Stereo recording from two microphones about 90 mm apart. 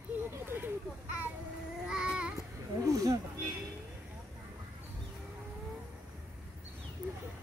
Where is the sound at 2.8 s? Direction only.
40° right (ahead or behind).